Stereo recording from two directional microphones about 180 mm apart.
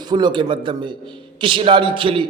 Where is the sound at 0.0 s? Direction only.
25° right (ahead or behind).